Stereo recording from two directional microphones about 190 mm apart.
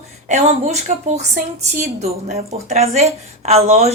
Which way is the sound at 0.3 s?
35° right (ahead or behind).